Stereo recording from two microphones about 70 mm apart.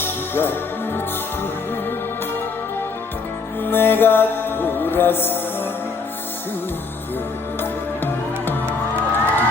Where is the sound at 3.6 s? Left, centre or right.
Left.